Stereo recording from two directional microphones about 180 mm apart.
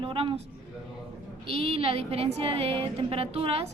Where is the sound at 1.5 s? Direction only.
30° right (ahead or behind).